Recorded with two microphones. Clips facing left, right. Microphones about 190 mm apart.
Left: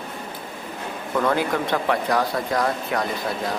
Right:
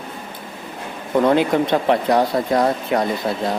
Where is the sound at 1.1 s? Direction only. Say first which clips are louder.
Right 6 dB; 20° right (ahead or behind).